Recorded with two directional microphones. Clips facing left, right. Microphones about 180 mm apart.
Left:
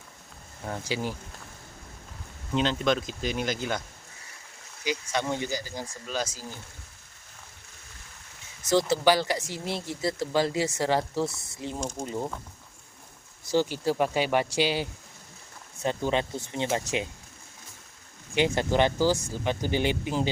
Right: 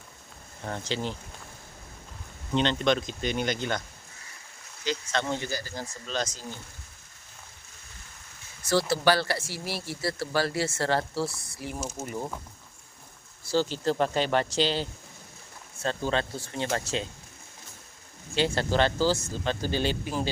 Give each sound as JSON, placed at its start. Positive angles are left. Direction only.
{"t": 0.6, "sound": "speech", "side_deg": 10}
{"t": 2.5, "sound": "speech", "side_deg": 5}
{"t": 8.9, "sound": "speech", "side_deg": 15}
{"t": 13.5, "sound": "speech", "side_deg": 15}
{"t": 18.3, "sound": "speech", "side_deg": 15}